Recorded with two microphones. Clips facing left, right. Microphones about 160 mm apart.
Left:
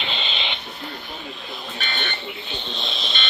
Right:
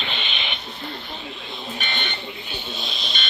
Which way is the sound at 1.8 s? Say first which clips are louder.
Left 2 dB; 15° right (ahead or behind).